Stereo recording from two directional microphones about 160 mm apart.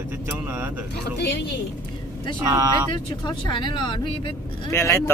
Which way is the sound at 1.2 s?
90° left.